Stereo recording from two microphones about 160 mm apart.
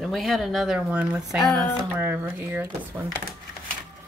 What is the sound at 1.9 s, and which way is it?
Speech, 10° right (ahead or behind).